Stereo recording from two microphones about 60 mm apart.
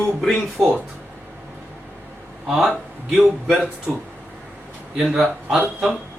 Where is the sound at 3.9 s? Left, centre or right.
Centre.